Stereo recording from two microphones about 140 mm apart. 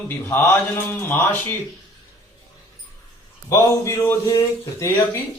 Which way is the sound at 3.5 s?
20° left (ahead or behind).